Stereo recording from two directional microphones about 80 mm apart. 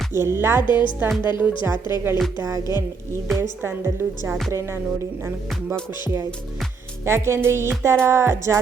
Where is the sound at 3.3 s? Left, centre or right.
Right.